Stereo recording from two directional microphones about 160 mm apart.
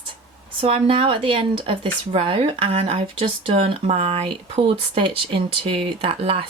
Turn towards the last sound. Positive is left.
turn(degrees=-40)  # may be behind; listen again after turning